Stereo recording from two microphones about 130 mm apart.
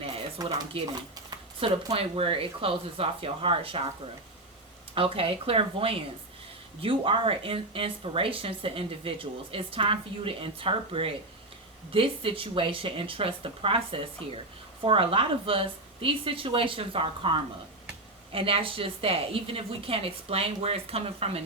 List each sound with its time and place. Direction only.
0.4 s speech: 30° right (ahead or behind)
0.7 s speech: 45° right (ahead or behind)
4.9 s speech: 45° right (ahead or behind)